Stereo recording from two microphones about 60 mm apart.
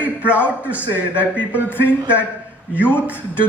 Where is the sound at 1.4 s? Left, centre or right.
Left.